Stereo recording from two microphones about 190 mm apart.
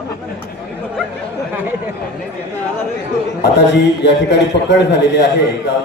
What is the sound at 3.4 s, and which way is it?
A man's voice, 65° left (ahead or behind).